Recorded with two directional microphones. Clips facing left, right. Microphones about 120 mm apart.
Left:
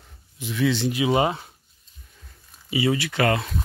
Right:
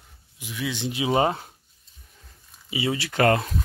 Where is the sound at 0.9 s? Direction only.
30° right (ahead or behind).